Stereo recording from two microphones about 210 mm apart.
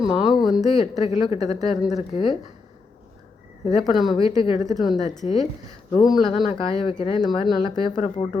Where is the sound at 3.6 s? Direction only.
30° left (ahead or behind).